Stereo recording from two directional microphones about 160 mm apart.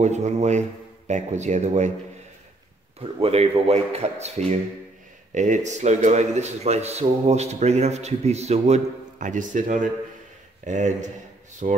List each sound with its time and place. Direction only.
0.0 s speech: 45° right (ahead or behind)
3.0 s speech: 35° right (ahead or behind)